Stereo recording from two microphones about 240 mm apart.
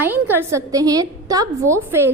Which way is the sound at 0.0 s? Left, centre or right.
Centre.